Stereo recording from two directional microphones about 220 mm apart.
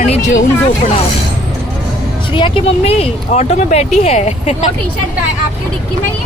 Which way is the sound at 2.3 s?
25° left (ahead or behind).